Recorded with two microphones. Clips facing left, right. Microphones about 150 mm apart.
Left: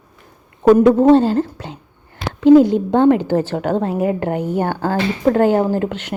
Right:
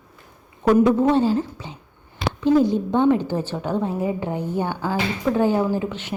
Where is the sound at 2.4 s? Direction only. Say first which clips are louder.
Left 8 dB; 75° left (ahead or behind).